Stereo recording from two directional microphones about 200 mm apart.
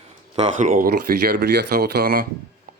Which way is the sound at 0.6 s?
40° right (ahead or behind).